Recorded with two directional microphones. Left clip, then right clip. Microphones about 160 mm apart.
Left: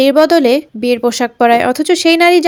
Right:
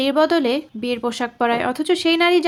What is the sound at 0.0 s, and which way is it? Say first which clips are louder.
Speech: left 8 dB; 25° left (ahead or behind).